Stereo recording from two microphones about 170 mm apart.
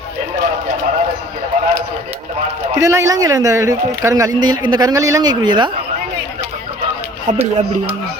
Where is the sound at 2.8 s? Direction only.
20° right (ahead or behind).